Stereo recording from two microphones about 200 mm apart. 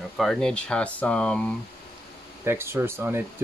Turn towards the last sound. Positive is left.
turn(degrees=-10)  # may be behind; listen again after turning